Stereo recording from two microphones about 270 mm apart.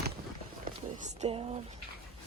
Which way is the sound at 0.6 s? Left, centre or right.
Right.